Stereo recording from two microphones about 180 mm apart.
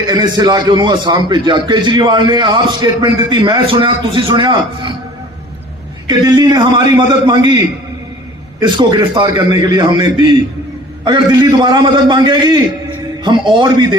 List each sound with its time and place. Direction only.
0.1 s a man's voice: 25° right (ahead or behind)
6.1 s a man's voice: 25° right (ahead or behind)
8.6 s a man's voice: 25° right (ahead or behind)